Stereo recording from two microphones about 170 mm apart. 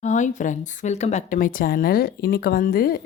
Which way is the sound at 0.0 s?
45° left (ahead or behind).